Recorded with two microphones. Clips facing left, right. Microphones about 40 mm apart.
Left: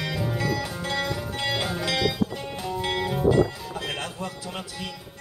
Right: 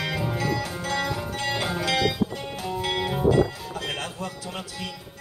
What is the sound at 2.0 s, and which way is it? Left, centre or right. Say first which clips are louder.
Music: right 1 dB; centre.